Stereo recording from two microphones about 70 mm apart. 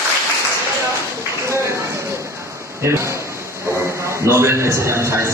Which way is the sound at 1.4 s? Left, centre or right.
Right.